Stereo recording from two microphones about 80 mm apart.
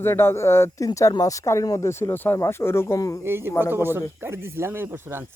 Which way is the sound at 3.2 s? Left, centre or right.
Right.